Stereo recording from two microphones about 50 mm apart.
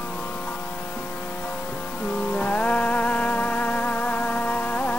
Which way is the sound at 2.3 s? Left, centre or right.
Left.